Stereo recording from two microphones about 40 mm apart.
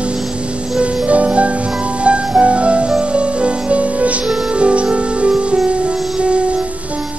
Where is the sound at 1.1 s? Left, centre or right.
Right.